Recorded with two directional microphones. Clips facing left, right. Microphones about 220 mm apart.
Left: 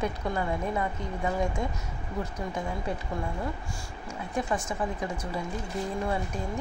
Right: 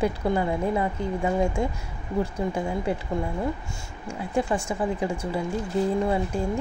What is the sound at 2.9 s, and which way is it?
Speech, 30° right (ahead or behind).